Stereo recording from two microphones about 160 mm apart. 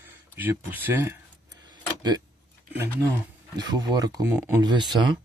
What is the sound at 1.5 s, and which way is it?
Keys jangling, 25° right (ahead or behind).